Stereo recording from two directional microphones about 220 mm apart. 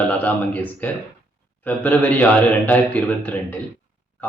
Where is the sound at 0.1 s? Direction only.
5° left (ahead or behind).